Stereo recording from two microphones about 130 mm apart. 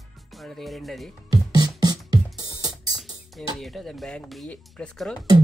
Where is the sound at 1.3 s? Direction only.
30° right (ahead or behind).